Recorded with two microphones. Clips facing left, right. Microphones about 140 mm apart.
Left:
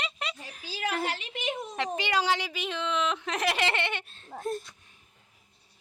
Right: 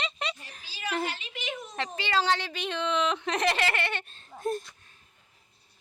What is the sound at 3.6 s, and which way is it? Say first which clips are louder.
Giggle: even; 20° left (ahead or behind).